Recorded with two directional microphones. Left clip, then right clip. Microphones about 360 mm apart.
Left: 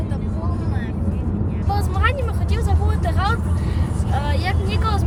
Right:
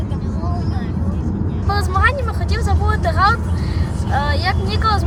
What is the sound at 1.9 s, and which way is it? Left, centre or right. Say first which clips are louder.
Speech: right 8 dB; centre.